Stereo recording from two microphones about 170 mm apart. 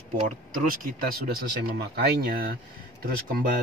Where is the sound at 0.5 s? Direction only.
55° right (ahead or behind).